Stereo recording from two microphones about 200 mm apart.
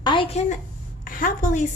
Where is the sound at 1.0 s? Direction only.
40° left (ahead or behind).